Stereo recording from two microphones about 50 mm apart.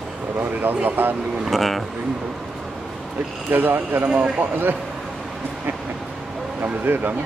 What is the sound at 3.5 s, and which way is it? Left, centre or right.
Speech, right.